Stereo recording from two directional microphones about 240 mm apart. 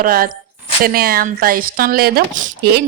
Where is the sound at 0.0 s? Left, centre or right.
Right.